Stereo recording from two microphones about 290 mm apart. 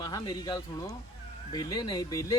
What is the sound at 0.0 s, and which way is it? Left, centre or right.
Speech, centre.